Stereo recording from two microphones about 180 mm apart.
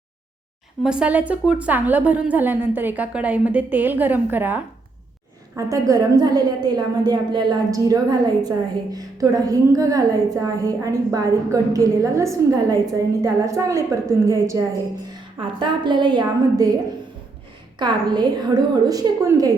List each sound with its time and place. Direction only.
0.8 s a woman's voice: 5° right (ahead or behind); by 16.7 s 20° right (ahead or behind)
17.7 s a woman's voice: 25° right (ahead or behind)